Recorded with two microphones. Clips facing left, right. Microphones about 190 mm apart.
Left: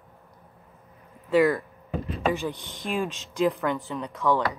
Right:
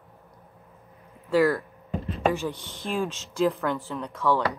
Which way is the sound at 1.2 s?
Centre (ahead or behind).